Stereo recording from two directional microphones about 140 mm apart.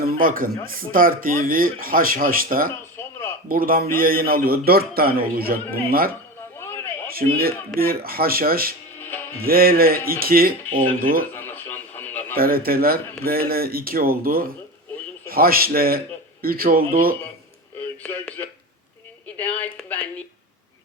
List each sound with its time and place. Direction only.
0.0 s speech: 85° right
7.1 s a man's voice: 90° right
9.0 s music: 15° left (ahead or behind)
9.4 s speech: 90° right
11.3 s radio: 15° left (ahead or behind)
12.4 s speech: 90° right
18.0 s speech: 15° left (ahead or behind)